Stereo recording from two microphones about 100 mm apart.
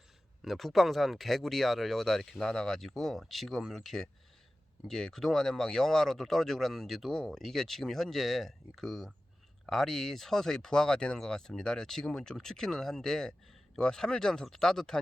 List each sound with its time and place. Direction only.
0.4 s speech: centre (ahead or behind)